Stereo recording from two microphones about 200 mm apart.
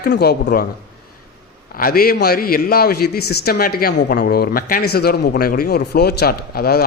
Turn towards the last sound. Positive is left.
turn(degrees=50)  # may be behind; listen again after turning